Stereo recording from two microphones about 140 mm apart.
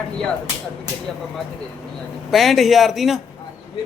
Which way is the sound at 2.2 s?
Centre (ahead or behind).